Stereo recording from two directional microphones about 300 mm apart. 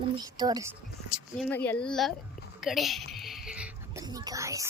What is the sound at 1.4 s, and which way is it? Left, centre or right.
Speech, centre.